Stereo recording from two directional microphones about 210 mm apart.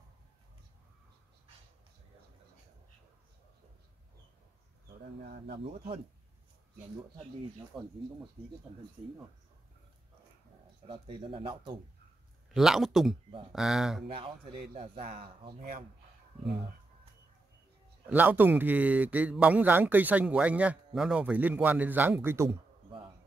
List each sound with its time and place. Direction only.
5.2 s speech: 50° right (ahead or behind)
5.6 s speech: 30° right (ahead or behind)
7.7 s speech: centre (ahead or behind)
10.9 s speech: 25° right (ahead or behind)
12.5 s speech: centre (ahead or behind)
14.0 s speech: 25° right (ahead or behind)
18.0 s a man's voice: 10° right (ahead or behind)